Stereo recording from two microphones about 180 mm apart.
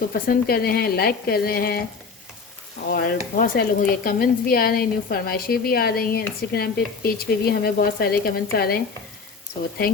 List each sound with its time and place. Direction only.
0.1 s speech: 55° left (ahead or behind)
2.9 s speech: 55° left (ahead or behind)